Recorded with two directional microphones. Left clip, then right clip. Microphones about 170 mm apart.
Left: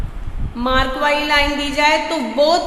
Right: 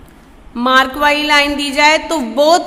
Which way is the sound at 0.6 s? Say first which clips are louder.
Right 6 dB; 30° right (ahead or behind).